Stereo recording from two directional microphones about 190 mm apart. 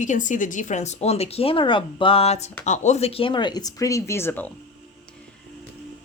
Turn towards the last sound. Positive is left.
turn(degrees=10)  # may be behind; listen again after turning